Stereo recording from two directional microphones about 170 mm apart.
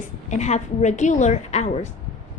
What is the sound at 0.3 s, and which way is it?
A woman's voice, 45° left (ahead or behind).